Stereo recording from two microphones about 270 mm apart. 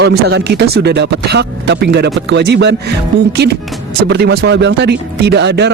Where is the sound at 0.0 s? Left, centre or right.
Right.